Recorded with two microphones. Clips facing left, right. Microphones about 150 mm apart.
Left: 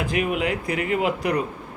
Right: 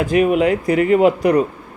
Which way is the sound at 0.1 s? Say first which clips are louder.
Right 11 dB; 35° right (ahead or behind).